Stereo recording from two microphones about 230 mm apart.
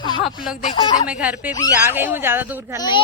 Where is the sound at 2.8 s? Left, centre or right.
Centre.